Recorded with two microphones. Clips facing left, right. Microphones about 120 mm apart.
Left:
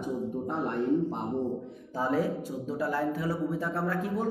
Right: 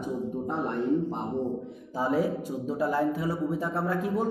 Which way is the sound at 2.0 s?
10° right (ahead or behind).